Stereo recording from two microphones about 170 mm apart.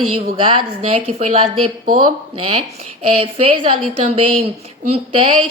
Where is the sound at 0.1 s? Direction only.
30° right (ahead or behind).